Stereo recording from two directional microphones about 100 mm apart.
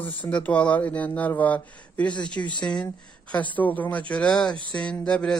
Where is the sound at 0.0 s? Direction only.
15° left (ahead or behind).